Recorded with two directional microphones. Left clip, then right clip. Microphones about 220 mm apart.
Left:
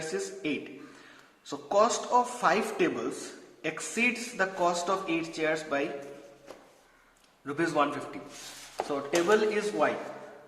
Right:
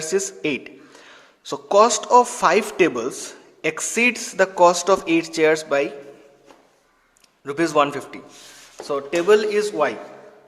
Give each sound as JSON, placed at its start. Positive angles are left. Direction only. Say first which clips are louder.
{"t": 0.1, "sound": "speech", "louder": "right 13 dB", "side_deg": -50}
{"t": 7.4, "sound": "speech", "louder": "right 9 dB", "side_deg": -45}